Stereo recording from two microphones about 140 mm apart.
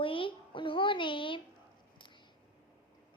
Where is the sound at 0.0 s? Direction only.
40° left (ahead or behind).